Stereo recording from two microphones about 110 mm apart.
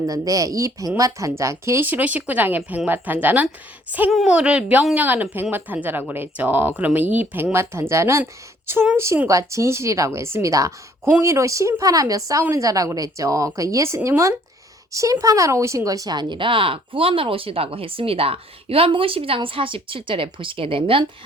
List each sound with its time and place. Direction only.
0.0 s speech: 30° right (ahead or behind); by 21.0 s 55° right (ahead or behind)